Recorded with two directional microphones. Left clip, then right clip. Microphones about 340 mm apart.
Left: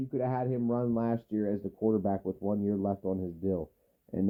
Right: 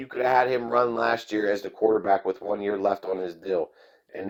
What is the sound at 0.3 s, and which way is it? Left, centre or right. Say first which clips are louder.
Speech: right 11 dB; right.